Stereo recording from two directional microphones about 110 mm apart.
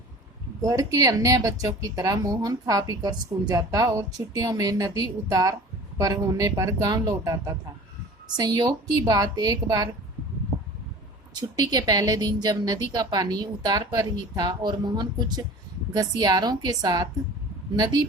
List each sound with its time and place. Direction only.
0.6 s speech: 30° right (ahead or behind)
11.3 s speech: 40° right (ahead or behind)